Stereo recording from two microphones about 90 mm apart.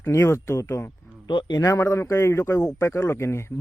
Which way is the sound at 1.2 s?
50° left (ahead or behind).